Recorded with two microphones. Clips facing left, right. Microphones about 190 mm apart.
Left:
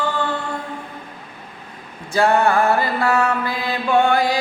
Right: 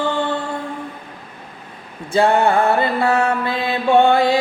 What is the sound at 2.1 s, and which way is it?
Mantra, 25° right (ahead or behind).